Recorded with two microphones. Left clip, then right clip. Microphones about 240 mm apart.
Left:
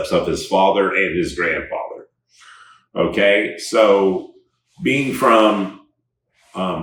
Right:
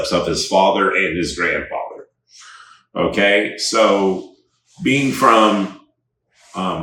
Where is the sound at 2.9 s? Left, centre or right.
Centre.